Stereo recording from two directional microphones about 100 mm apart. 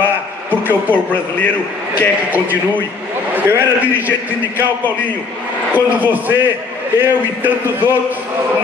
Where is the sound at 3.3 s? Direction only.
20° right (ahead or behind).